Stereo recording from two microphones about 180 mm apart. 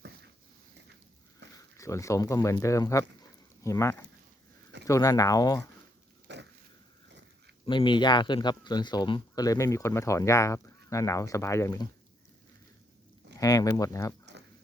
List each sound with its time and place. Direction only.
1.5 s speech: 15° left (ahead or behind)
6.2 s dog: 75° right (ahead or behind)
7.6 s speech: 25° left (ahead or behind)
13.4 s speech: 20° left (ahead or behind)